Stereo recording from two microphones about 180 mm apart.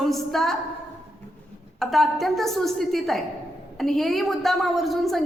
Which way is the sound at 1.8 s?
Centre (ahead or behind).